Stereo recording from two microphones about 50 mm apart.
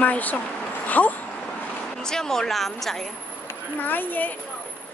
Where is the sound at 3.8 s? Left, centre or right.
Left.